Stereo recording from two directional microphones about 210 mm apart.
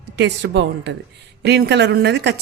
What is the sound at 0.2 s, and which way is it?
A woman's voice, 55° right (ahead or behind).